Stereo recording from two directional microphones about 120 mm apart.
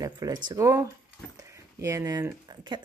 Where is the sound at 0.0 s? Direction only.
30° right (ahead or behind).